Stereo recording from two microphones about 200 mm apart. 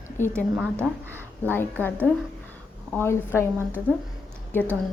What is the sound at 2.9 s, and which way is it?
A woman's voice, 10° left (ahead or behind).